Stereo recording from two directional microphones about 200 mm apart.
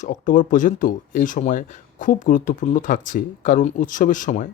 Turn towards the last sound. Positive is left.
turn(degrees=40)  # may be behind; listen again after turning